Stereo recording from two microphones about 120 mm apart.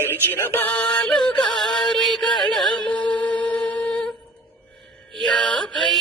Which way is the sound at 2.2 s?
40° left (ahead or behind).